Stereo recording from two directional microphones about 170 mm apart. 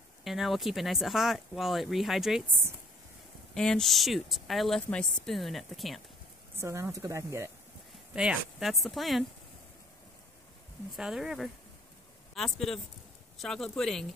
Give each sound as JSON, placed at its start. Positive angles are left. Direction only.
{"t": 0.2, "sound": "speech", "side_deg": 0}
{"t": 3.5, "sound": "speech", "side_deg": 5}
{"t": 6.6, "sound": "speech", "side_deg": -15}
{"t": 8.1, "sound": "speech", "side_deg": -5}
{"t": 10.9, "sound": "speech", "side_deg": 0}